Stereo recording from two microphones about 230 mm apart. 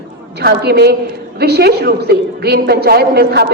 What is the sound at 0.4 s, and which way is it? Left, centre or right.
A woman's voice, right.